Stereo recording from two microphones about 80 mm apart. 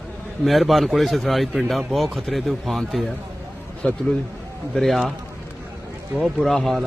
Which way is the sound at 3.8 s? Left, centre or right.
Centre.